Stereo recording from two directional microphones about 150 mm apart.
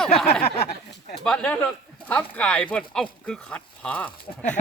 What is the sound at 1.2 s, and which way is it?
A man's voice, 5° left (ahead or behind).